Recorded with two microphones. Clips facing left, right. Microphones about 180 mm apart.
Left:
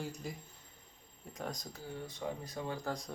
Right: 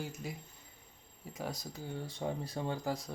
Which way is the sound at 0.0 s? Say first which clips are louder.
Even; centre (ahead or behind).